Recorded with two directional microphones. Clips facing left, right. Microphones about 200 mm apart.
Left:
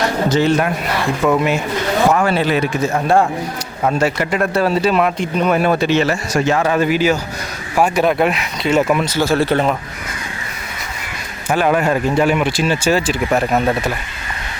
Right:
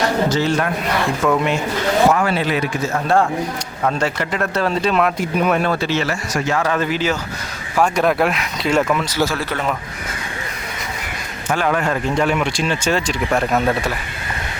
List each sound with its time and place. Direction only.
0.3 s speech: 20° left (ahead or behind)
1.2 s speech: 5° left (ahead or behind)
2.1 s a man's voice: 40° left (ahead or behind)
2.8 s speech: 15° left (ahead or behind); by 5.6 s centre (ahead or behind)
5.6 s speech: 15° left (ahead or behind)
6.7 s speech: 10° left (ahead or behind)
9.3 s a man's voice: 30° left (ahead or behind)
11.4 s speech: 15° left (ahead or behind)